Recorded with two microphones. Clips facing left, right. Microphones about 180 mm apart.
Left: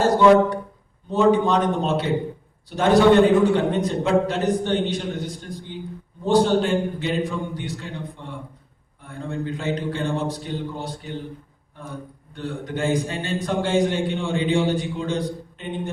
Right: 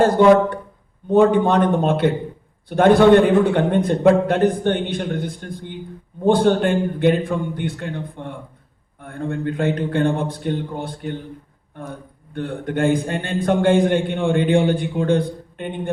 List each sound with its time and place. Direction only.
1.1 s a man's voice: 55° right (ahead or behind)